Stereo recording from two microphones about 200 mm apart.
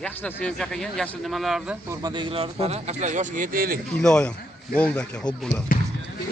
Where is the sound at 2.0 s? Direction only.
25° right (ahead or behind); by 3.7 s 45° right (ahead or behind).